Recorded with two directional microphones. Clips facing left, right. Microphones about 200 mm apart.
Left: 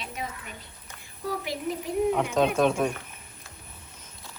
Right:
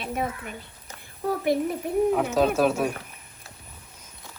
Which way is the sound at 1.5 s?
55° right (ahead or behind).